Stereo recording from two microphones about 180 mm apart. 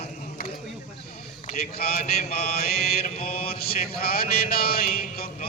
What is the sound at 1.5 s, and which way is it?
Mantra, 60° left (ahead or behind).